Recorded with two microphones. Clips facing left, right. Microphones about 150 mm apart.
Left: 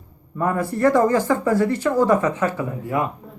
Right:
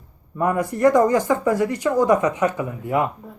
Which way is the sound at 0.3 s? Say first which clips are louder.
Right 1 dB; 15° right (ahead or behind).